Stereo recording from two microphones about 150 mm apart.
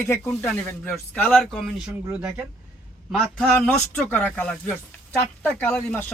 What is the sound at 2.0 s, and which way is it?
A man's voice, 10° right (ahead or behind).